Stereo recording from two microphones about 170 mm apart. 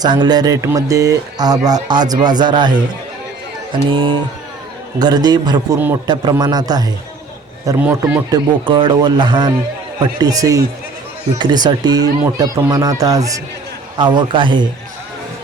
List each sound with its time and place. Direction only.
0.0 s speech: 25° right (ahead or behind)
7.8 s a man's voice: 10° right (ahead or behind)
8.3 s speech: 30° right (ahead or behind)